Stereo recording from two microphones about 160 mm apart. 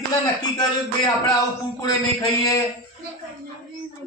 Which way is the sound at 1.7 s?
20° left (ahead or behind).